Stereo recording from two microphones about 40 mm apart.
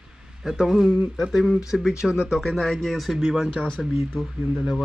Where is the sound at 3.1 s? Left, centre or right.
Centre.